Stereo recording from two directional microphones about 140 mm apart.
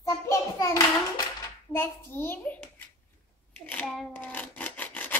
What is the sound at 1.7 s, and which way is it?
A child's voice, 15° left (ahead or behind).